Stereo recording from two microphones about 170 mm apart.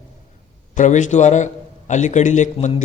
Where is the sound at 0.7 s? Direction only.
45° left (ahead or behind).